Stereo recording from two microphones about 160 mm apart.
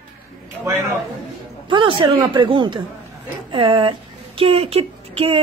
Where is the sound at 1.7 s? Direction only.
30° right (ahead or behind).